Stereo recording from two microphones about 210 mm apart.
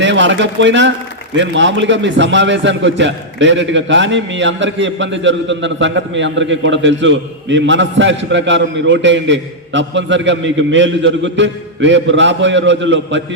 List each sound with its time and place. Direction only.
0.0 s a man's voice: 60° right (ahead or behind)